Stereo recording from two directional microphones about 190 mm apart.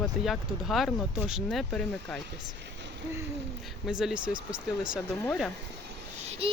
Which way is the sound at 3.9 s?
5° right (ahead or behind).